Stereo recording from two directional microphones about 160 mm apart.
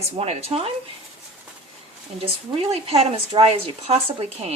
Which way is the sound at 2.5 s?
40° right (ahead or behind).